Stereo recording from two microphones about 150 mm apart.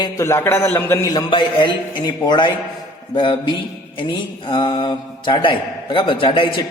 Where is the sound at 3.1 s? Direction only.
30° left (ahead or behind).